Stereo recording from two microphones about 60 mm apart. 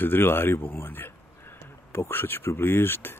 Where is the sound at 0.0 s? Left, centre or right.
Left.